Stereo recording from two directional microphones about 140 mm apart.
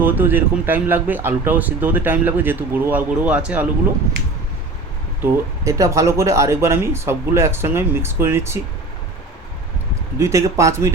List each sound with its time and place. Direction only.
0.0 s speech: 15° right (ahead or behind)
5.2 s speech: 25° right (ahead or behind)
10.2 s speech: 20° right (ahead or behind)